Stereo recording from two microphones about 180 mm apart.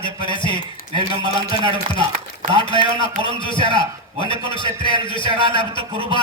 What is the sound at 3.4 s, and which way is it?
A man's voice, 25° left (ahead or behind).